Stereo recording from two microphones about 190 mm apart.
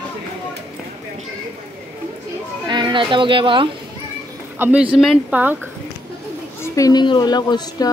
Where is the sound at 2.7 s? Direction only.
25° right (ahead or behind).